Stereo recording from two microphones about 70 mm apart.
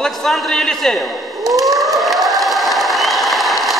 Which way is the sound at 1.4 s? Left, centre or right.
Right.